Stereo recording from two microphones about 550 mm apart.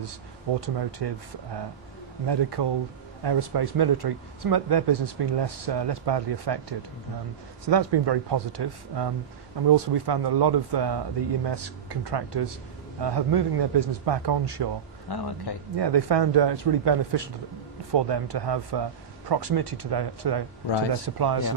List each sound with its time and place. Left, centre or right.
0.6 s speech: right
2.2 s speech: right
7.6 s speech: right
15.0 s speech: left
15.7 s speech: right